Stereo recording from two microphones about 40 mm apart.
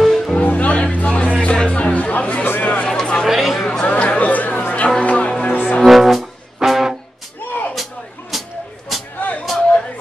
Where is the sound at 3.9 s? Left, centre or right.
Left.